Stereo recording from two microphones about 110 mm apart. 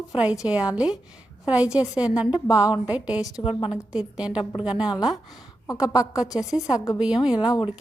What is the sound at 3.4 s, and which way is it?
Speech, 55° left (ahead or behind).